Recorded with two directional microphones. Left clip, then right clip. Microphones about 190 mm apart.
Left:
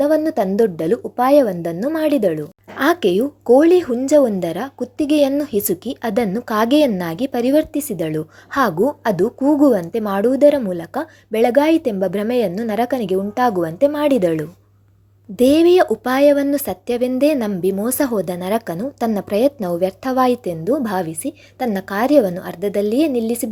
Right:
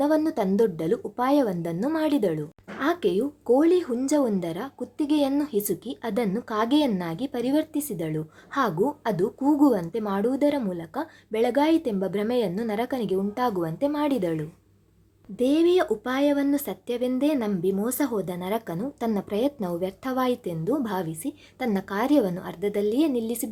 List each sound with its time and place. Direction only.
0.0 s a woman's voice: 15° left (ahead or behind)